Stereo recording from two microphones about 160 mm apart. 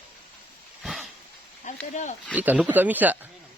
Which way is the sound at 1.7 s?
50° left (ahead or behind).